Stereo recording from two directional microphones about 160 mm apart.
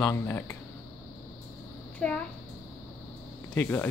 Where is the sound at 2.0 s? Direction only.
5° left (ahead or behind).